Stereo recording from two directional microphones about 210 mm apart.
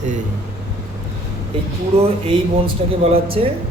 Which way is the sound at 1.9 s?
30° right (ahead or behind).